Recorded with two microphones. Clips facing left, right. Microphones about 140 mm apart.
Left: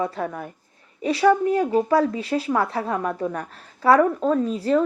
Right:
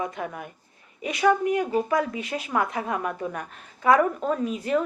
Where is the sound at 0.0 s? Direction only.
35° left (ahead or behind).